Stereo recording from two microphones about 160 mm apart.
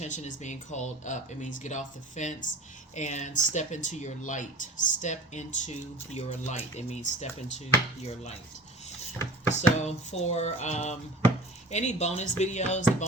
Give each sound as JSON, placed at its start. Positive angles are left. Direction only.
{"t": 0.0, "sound": "speech", "side_deg": 50}
{"t": 8.0, "sound": "chopping", "side_deg": 40}
{"t": 9.6, "sound": "speech", "side_deg": 45}